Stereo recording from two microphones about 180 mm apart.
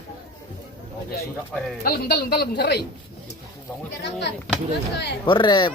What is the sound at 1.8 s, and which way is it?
A woman's voice, 60° left (ahead or behind).